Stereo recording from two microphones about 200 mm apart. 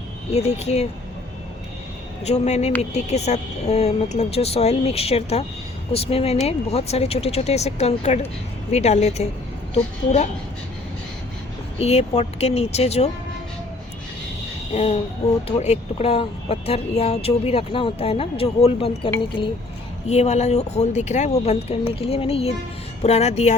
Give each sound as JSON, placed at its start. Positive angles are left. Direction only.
{"t": 0.3, "sound": "speech", "side_deg": 35}
{"t": 2.2, "sound": "speech", "side_deg": 35}
{"t": 11.8, "sound": "speech", "side_deg": 30}
{"t": 14.7, "sound": "a sound", "side_deg": 30}
{"t": 15.4, "sound": "speech", "side_deg": 35}